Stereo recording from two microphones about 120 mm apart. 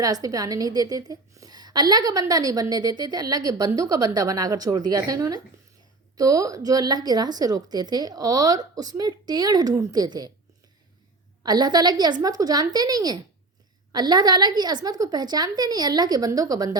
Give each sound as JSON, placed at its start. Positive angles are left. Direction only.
{"t": 0.0, "sound": "a woman's voice", "side_deg": -30}
{"t": 11.4, "sound": "a woman's voice", "side_deg": -35}